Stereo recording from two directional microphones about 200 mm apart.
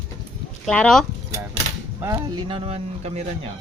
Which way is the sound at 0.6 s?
5° left (ahead or behind).